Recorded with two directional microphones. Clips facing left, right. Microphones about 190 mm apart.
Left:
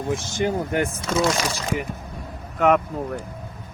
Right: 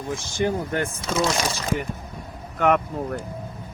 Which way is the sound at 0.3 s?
15° left (ahead or behind).